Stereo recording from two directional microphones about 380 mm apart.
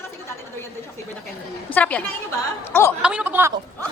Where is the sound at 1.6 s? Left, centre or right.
Centre.